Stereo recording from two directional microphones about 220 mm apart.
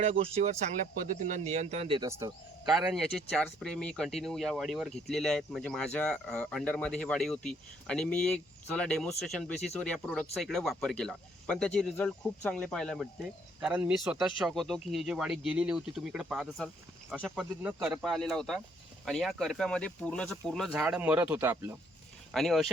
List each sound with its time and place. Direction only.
0.0 s speech: 30° right (ahead or behind)
2.6 s speech: centre (ahead or behind)
22.3 s speech: centre (ahead or behind)